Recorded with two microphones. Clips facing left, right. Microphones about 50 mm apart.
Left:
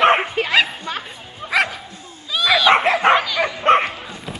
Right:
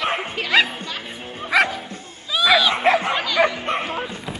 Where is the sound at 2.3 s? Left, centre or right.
Centre.